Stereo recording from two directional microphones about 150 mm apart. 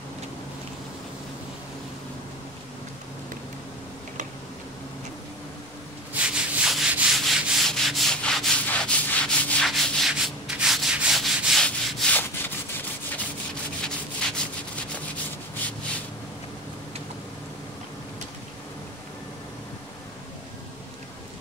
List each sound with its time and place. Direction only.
6.1 s rub: 10° right (ahead or behind); by 12.4 s 10° left (ahead or behind)
13.8 s rub: 5° left (ahead or behind)